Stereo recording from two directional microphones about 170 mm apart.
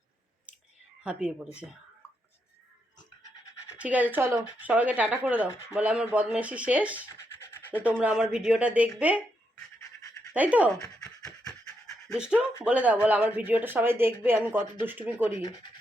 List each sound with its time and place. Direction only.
3.8 s speech: 10° right (ahead or behind)
10.3 s speech: 10° right (ahead or behind)
10.8 s speech: 20° left (ahead or behind)
11.2 s pant: 5° left (ahead or behind)
12.6 s speech: 10° right (ahead or behind)
15.4 s speech: 25° left (ahead or behind)